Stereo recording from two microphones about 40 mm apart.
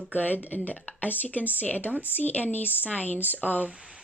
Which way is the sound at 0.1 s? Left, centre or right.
Left.